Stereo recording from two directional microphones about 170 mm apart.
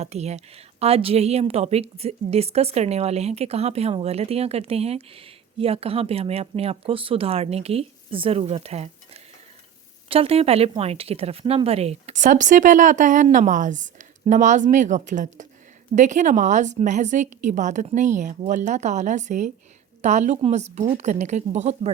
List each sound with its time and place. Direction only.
0.0 s a woman's voice: 40° right (ahead or behind)